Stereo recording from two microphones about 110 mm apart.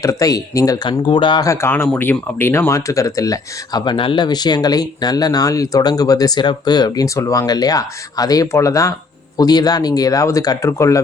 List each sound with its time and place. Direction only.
0.0 s speech: 30° left (ahead or behind)
0.9 s speech: 50° left (ahead or behind)
1.5 s speech: 20° left (ahead or behind)